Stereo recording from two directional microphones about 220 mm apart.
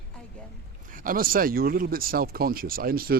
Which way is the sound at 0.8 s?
40° right (ahead or behind).